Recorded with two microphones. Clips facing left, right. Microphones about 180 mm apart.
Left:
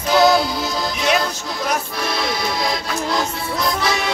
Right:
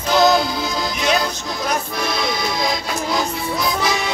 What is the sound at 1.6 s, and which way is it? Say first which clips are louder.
Music: even; 5° left (ahead or behind).